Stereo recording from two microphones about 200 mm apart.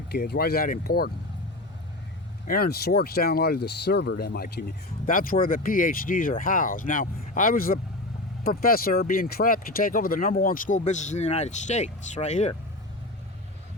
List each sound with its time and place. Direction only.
0.1 s speech: 50° left (ahead or behind)
2.5 s speech: 50° left (ahead or behind); by 12.5 s 35° left (ahead or behind)